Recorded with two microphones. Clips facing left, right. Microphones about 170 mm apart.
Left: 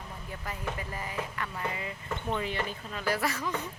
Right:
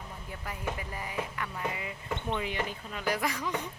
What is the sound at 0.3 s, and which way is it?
Speech, 15° right (ahead or behind).